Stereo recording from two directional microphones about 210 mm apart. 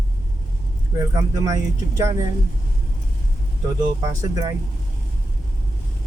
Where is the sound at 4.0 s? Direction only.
15° right (ahead or behind).